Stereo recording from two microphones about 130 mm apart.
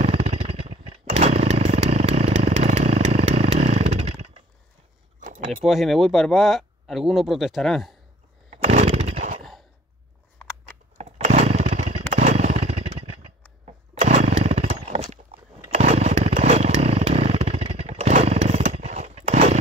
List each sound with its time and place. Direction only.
0.0 s chainsaw: 55° right (ahead or behind)
5.5 s speech: centre (ahead or behind)
8.5 s chainsaw: 55° right (ahead or behind)
11.0 s chainsaw: 60° right (ahead or behind)
15.7 s motorcycle: 55° right (ahead or behind)